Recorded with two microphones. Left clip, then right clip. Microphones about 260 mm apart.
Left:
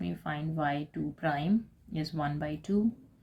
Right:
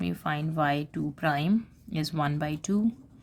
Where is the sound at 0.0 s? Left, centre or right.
Right.